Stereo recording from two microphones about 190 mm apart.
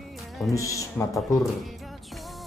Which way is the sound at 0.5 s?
15° left (ahead or behind).